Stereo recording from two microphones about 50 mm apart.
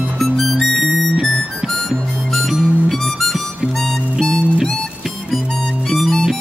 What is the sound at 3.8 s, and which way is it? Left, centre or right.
Music, centre.